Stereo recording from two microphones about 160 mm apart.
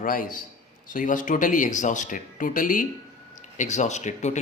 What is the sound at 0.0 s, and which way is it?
Speech, 60° left (ahead or behind).